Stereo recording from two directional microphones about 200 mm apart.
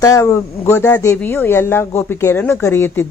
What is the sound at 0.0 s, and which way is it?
Speech, 15° left (ahead or behind).